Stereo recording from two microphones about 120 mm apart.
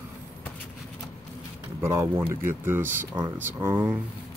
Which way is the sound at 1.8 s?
20° right (ahead or behind).